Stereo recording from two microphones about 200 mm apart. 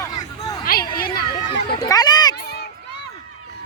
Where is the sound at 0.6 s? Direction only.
45° left (ahead or behind).